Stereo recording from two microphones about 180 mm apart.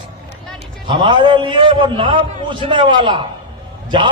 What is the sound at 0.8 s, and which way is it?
A man's voice, 25° right (ahead or behind).